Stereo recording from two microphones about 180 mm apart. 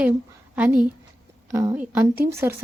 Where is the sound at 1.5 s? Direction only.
15° right (ahead or behind).